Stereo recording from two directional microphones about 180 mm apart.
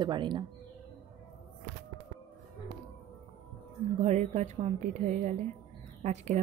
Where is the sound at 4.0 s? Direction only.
40° right (ahead or behind).